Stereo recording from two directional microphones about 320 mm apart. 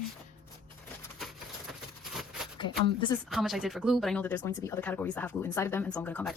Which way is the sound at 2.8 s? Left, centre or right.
Centre.